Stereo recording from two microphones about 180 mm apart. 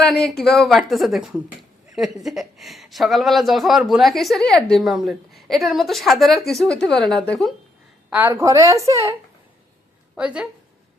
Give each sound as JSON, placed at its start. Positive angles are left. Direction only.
{"t": 0.0, "sound": "a woman's voice", "side_deg": 5}
{"t": 8.1, "sound": "a woman's voice", "side_deg": -10}
{"t": 10.2, "sound": "a woman's voice", "side_deg": -5}